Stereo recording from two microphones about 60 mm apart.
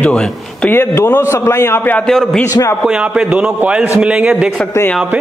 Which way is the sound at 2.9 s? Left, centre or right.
Centre.